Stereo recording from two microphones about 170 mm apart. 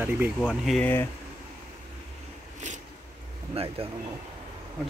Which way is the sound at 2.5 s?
45° right (ahead or behind).